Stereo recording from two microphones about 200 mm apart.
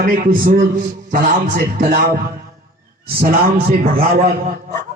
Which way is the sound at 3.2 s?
45° right (ahead or behind).